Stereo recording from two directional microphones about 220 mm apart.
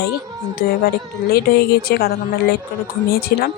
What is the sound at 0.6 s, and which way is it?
Speech, 40° left (ahead or behind).